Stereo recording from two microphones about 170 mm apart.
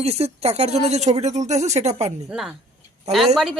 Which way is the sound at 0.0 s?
40° right (ahead or behind).